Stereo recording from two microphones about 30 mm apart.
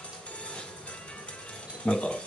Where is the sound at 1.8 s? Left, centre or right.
Left.